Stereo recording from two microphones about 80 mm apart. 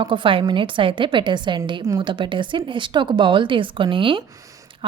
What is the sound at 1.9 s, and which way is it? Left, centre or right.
A woman's voice, right.